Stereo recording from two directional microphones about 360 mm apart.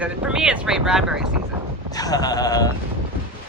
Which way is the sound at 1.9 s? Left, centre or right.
Centre.